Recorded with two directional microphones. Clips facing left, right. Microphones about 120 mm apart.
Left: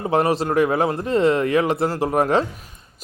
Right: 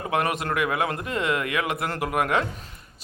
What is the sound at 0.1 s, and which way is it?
Speech, 35° left (ahead or behind).